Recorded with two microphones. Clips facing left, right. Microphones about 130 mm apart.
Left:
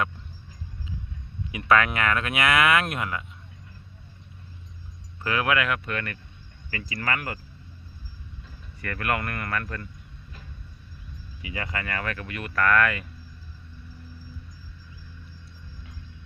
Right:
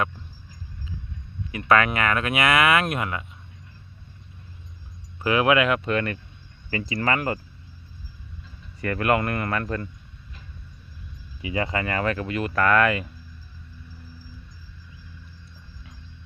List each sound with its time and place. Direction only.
1.6 s speech: centre (ahead or behind)
5.2 s speech: 20° right (ahead or behind)
8.8 s speech: 25° right (ahead or behind)
11.4 s speech: 25° right (ahead or behind)